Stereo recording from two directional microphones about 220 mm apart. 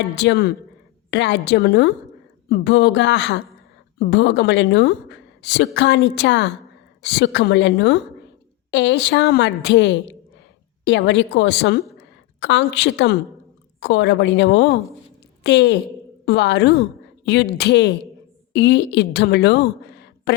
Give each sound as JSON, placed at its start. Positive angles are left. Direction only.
{"t": 0.2, "sound": "a woman's voice", "side_deg": 50}